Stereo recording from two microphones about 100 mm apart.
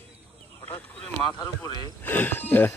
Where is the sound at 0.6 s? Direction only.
20° left (ahead or behind).